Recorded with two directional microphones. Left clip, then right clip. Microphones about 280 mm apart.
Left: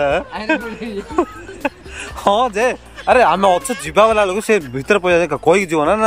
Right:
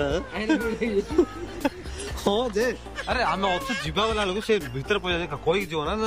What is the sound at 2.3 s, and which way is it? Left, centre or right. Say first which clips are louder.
Speech: left 8 dB; left.